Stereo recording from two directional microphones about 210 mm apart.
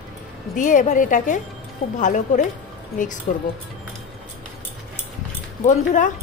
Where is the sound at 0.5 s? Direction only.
40° left (ahead or behind).